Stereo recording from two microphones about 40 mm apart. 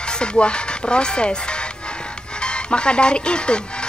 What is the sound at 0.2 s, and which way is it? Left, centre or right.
Speech, left.